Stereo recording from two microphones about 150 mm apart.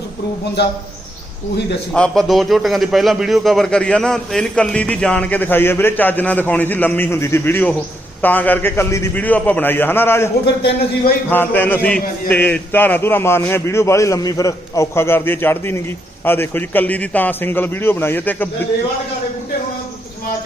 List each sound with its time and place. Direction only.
1.9 s a man's voice: centre (ahead or behind)
10.4 s a man's voice: 90° left
11.3 s a man's voice: 15° left (ahead or behind)